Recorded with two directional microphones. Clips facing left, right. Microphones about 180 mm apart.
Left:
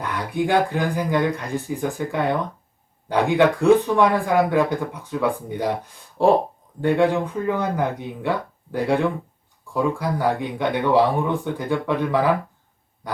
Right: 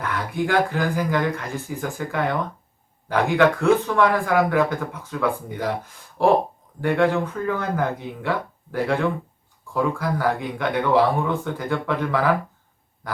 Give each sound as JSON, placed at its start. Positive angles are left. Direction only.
{"t": 0.0, "sound": "speech", "side_deg": 15}
{"t": 6.8, "sound": "speech", "side_deg": 15}